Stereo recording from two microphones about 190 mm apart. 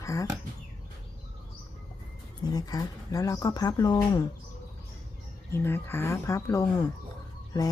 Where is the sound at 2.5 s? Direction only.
20° left (ahead or behind).